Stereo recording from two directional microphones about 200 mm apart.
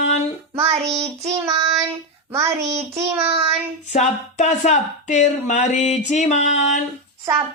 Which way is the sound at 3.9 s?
35° left (ahead or behind).